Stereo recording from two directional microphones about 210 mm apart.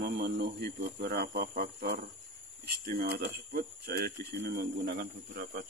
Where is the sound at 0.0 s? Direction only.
50° right (ahead or behind).